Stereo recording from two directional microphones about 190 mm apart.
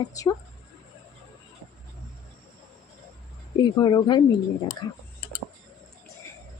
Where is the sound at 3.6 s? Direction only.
20° left (ahead or behind).